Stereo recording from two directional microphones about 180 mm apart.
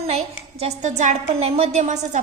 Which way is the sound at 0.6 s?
40° right (ahead or behind).